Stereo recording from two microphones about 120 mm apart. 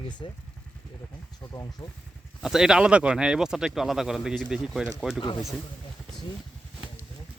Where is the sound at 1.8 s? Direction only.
25° left (ahead or behind).